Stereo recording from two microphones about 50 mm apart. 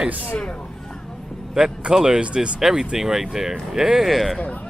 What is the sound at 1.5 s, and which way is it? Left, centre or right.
Speech, centre.